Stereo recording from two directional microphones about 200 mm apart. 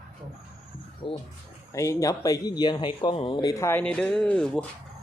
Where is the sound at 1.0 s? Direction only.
25° left (ahead or behind); by 4.6 s 5° left (ahead or behind).